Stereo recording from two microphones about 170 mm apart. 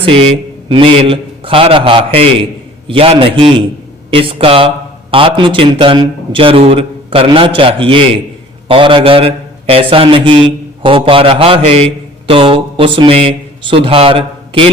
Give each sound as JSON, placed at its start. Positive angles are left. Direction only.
{"t": 0.0, "sound": "a man's voice", "side_deg": -35}